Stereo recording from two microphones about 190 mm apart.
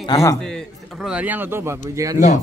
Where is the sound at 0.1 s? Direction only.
15° left (ahead or behind).